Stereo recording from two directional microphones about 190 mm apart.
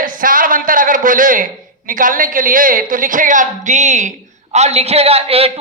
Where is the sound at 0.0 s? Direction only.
45° right (ahead or behind).